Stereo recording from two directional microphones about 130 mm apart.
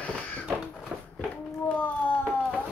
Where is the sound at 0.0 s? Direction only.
10° left (ahead or behind).